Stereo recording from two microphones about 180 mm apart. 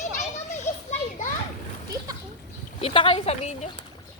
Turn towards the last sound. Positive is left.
turn(degrees=35)  # may be behind; listen again after turning